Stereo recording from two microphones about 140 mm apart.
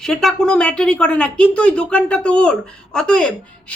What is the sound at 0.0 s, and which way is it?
Speech, 5° left (ahead or behind).